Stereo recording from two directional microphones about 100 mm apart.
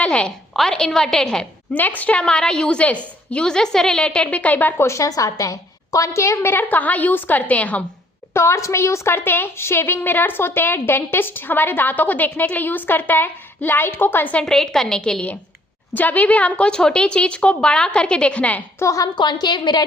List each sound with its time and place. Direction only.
0.0 s a woman's voice: 10° left (ahead or behind)
1.7 s a woman's voice: 15° left (ahead or behind)
8.3 s a woman's voice: 25° left (ahead or behind)
14.4 s a woman's voice: 5° left (ahead or behind)
18.8 s a woman's voice: 30° left (ahead or behind)
19.1 s a woman's voice: 50° left (ahead or behind)